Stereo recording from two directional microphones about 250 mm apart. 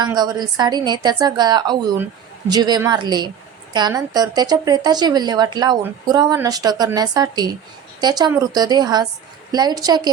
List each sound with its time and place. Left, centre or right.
0.0 s a woman's voice: centre